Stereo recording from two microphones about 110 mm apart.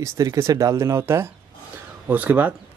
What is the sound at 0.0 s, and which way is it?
Speech, 25° right (ahead or behind).